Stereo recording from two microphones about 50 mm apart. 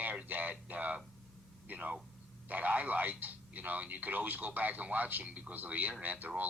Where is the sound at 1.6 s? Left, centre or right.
Right.